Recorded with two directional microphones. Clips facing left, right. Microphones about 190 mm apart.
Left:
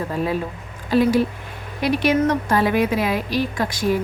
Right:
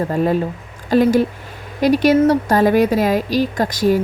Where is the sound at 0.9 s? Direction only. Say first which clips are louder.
Right 3 dB; 45° right (ahead or behind).